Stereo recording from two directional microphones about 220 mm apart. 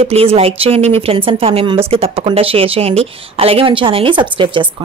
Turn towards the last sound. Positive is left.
turn(degrees=-20)  # may be behind; listen again after turning